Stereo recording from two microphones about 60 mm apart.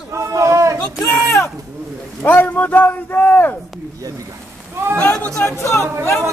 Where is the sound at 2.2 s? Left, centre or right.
Left.